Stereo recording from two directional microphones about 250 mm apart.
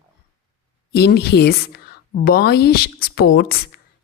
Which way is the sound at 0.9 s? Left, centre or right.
Left.